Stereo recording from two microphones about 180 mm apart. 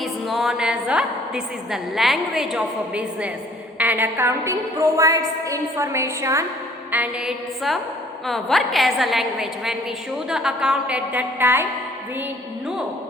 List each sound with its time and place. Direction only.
0.0 s music: centre (ahead or behind)
1.7 s a woman's voice: centre (ahead or behind)
6.9 s a woman's voice: 5° right (ahead or behind)